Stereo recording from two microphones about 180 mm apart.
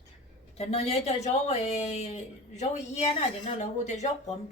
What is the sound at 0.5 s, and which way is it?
A woman's voice, 35° left (ahead or behind).